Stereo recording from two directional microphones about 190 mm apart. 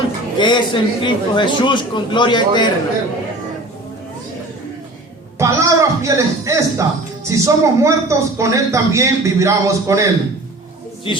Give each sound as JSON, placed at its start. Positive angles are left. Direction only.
{"t": 0.3, "sound": "a man's voice", "side_deg": 25}
{"t": 5.4, "sound": "speech", "side_deg": -15}
{"t": 11.1, "sound": "a man's voice", "side_deg": 25}